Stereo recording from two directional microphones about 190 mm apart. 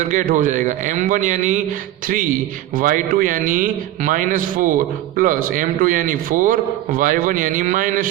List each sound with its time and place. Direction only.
0.1 s a man's voice: 45° right (ahead or behind)
2.7 s a man's voice: 45° right (ahead or behind)